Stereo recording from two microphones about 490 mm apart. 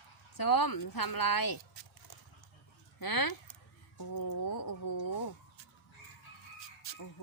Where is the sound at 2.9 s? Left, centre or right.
Left.